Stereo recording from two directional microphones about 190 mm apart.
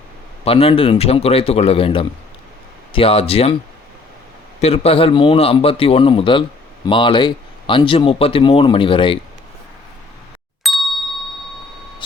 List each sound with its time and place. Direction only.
0.4 s speech: 30° left (ahead or behind)
4.6 s speech: 30° left (ahead or behind)
10.6 s ding: centre (ahead or behind)